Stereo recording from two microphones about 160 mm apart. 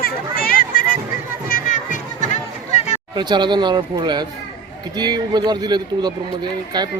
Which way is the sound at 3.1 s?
30° right (ahead or behind).